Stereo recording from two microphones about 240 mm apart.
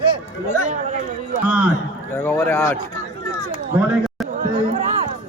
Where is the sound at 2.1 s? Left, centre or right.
Centre.